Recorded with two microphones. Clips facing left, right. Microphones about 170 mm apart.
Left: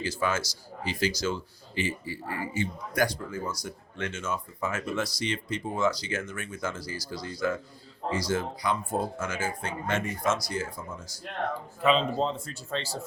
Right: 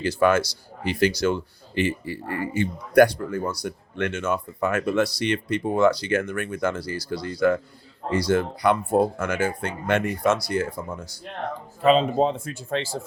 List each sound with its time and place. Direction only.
0.0 s speech: 60° right (ahead or behind)
11.8 s speech: 45° right (ahead or behind)